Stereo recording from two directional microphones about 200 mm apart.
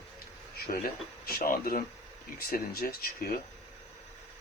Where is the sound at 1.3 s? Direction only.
45° left (ahead or behind).